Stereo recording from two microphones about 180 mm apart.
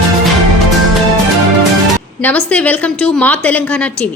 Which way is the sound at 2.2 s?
10° left (ahead or behind).